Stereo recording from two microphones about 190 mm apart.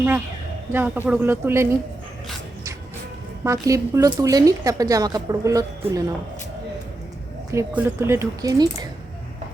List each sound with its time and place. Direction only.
0.7 s a woman's voice: 10° right (ahead or behind)
3.4 s a woman's voice: 15° right (ahead or behind)
7.5 s a woman's voice: 10° right (ahead or behind)